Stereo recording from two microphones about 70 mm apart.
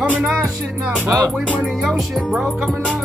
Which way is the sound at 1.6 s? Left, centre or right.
Centre.